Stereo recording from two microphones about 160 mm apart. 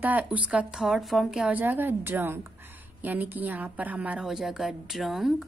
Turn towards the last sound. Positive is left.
turn(degrees=0)  # may be behind; listen again after turning